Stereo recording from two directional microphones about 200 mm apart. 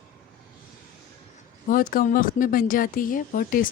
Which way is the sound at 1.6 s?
45° left (ahead or behind).